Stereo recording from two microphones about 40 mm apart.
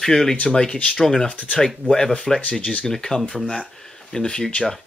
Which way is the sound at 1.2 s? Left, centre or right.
Left.